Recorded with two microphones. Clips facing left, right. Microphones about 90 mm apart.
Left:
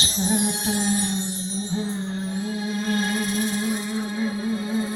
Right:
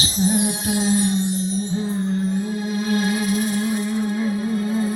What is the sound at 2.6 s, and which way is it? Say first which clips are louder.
Music: right 3 dB; 5° right (ahead or behind).